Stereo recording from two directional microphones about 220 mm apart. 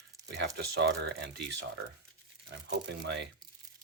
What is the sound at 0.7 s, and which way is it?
Speech, 50° right (ahead or behind).